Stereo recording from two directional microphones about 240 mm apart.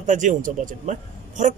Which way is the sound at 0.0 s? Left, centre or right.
Right.